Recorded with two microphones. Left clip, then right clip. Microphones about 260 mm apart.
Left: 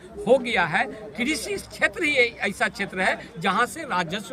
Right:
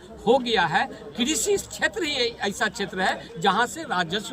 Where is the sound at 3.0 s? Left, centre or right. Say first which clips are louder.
Left 1 dB; centre.